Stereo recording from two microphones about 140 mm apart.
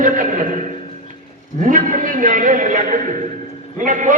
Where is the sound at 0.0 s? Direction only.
65° right (ahead or behind).